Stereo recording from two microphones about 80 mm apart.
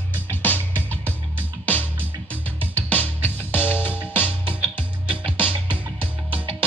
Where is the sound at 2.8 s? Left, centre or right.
Left.